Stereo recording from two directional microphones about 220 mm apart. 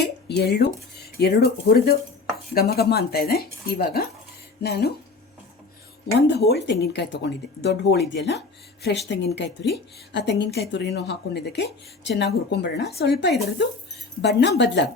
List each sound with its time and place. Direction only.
0.3 s speech: 50° left (ahead or behind)
6.2 s speech: 50° left (ahead or behind)